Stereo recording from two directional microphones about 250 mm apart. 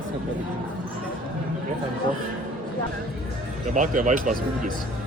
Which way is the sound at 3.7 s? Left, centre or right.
Right.